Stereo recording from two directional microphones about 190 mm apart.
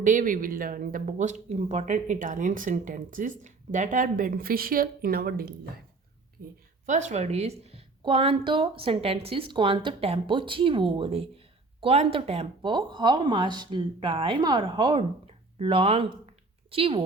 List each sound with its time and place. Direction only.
0.0 s speech: 45° right (ahead or behind)
6.8 s speech: 40° right (ahead or behind)